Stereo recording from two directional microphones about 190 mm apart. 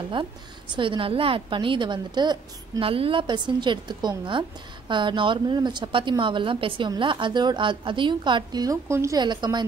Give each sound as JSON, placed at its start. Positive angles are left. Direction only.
{"t": 0.2, "sound": "a woman's voice", "side_deg": -25}